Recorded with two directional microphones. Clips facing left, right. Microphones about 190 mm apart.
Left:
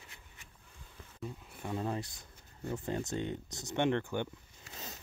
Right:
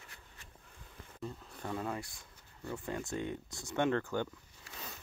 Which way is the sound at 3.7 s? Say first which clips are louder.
Left 1 dB; 20° left (ahead or behind).